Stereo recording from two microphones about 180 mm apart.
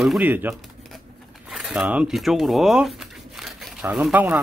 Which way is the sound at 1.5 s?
5° right (ahead or behind).